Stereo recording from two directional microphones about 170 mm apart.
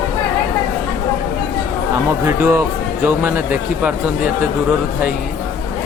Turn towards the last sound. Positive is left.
turn(degrees=-10)  # may be behind; listen again after turning